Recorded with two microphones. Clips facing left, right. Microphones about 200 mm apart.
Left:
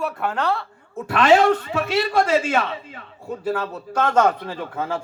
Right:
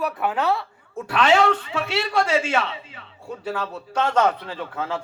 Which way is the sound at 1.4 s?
50° left (ahead or behind).